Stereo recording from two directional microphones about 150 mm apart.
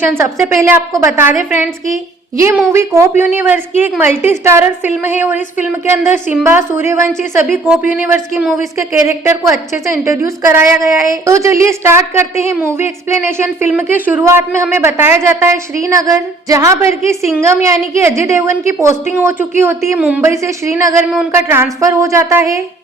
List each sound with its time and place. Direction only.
0.0 s a woman's voice: 15° right (ahead or behind)